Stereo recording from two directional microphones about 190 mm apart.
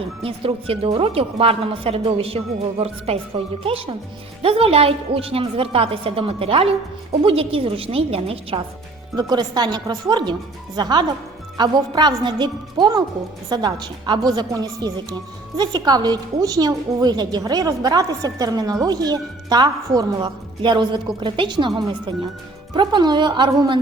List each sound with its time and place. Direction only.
0.2 s a woman's voice: 30° right (ahead or behind)